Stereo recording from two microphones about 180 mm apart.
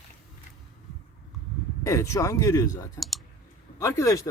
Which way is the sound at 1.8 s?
15° left (ahead or behind).